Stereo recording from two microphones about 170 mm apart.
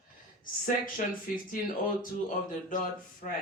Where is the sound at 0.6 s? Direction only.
55° left (ahead or behind).